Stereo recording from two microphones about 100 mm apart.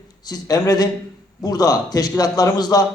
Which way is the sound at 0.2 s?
40° left (ahead or behind).